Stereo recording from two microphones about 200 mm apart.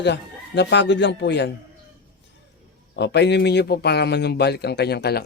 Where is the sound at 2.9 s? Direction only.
60° left (ahead or behind).